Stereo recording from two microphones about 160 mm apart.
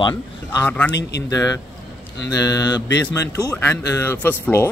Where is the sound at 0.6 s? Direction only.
10° left (ahead or behind).